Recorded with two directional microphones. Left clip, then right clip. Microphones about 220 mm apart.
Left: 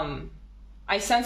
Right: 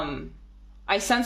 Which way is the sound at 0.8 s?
50° right (ahead or behind).